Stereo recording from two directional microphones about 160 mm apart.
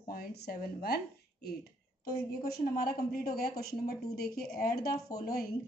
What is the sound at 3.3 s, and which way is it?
A woman's voice, 75° left (ahead or behind).